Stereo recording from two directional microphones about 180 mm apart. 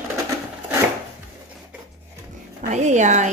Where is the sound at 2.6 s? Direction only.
40° right (ahead or behind).